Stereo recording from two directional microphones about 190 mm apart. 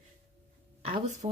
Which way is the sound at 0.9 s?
40° right (ahead or behind).